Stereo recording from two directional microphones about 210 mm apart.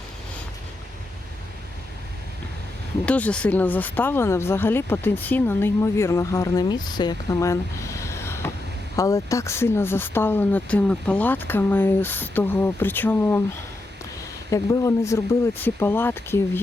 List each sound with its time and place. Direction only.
3.1 s speech: 5° left (ahead or behind)
14.5 s speech: 15° left (ahead or behind)